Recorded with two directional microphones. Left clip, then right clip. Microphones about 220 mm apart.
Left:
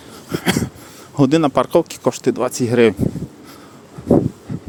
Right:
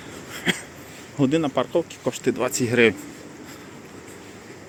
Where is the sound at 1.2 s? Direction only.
35° left (ahead or behind).